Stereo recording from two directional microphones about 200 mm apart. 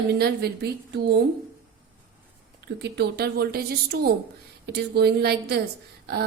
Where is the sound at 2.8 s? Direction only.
55° right (ahead or behind).